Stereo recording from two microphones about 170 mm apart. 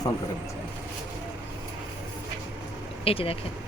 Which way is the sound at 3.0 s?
35° left (ahead or behind).